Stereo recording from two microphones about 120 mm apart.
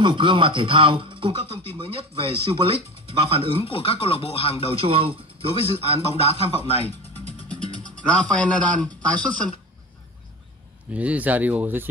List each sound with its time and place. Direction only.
0.0 s speech: 40° right (ahead or behind)
3.6 s speech: 50° left (ahead or behind)
4.7 s a man's voice: 50° right (ahead or behind)
6.2 s speech: 55° left (ahead or behind)
7.2 s music: 50° left (ahead or behind)
8.0 s a man's voice: 10° left (ahead or behind)
10.9 s speech: 10° right (ahead or behind)